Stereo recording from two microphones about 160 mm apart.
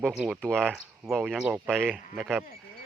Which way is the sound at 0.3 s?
5° left (ahead or behind).